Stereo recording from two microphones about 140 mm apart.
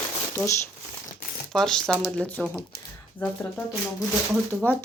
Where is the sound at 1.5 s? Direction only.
5° left (ahead or behind).